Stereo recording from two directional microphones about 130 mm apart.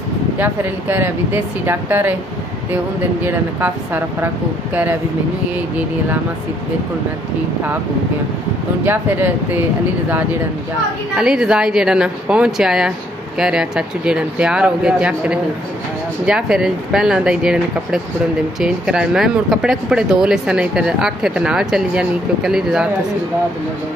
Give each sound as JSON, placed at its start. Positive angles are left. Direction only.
{"t": 0.4, "sound": "speech", "side_deg": -15}
{"t": 3.2, "sound": "speech", "side_deg": -15}
{"t": 8.8, "sound": "speech", "side_deg": -15}
{"t": 11.1, "sound": "speech", "side_deg": -5}